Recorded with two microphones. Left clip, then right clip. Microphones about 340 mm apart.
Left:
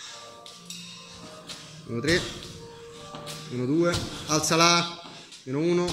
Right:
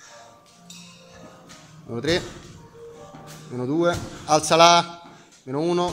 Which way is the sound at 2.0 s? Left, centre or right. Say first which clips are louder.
Right 1 dB; centre.